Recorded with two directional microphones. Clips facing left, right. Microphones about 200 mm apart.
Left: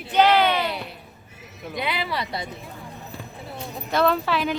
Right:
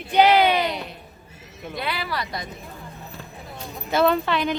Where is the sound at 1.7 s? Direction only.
20° left (ahead or behind).